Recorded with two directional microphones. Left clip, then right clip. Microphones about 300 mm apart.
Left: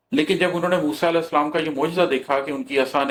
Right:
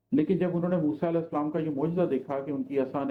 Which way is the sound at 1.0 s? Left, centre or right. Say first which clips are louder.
Left 9 dB; left.